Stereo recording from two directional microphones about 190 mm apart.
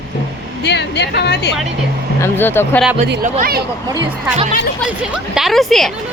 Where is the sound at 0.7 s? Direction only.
65° left (ahead or behind).